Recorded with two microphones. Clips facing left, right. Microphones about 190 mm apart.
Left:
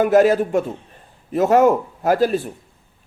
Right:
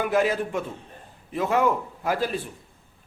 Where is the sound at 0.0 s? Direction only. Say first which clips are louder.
Left 9 dB; 40° left (ahead or behind).